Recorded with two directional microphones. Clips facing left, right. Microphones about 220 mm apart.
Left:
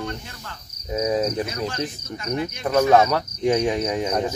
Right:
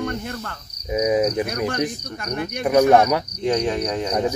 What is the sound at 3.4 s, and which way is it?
Cricket, 15° left (ahead or behind).